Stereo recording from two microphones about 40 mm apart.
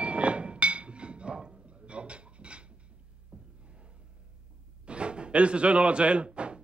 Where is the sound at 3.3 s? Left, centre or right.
Right.